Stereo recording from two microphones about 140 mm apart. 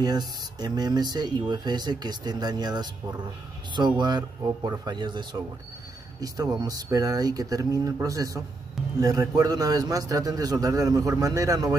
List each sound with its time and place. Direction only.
0.0 s a man's voice: 30° right (ahead or behind)